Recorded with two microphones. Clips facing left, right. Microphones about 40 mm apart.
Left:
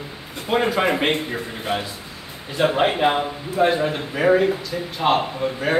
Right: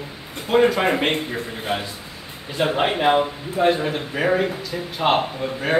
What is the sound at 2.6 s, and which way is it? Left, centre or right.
A man's voice, centre.